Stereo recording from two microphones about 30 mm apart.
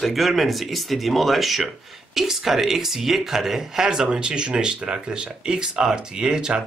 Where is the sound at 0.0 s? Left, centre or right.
Centre; by 4.1 s right.